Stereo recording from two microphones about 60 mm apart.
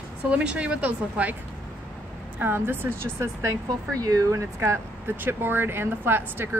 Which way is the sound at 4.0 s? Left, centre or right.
Right.